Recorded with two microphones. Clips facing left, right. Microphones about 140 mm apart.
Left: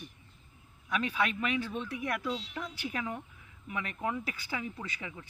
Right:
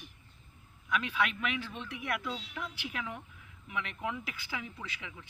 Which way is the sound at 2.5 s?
35° left (ahead or behind).